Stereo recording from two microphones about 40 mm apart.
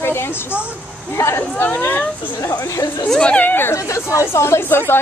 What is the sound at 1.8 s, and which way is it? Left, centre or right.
Speech, left.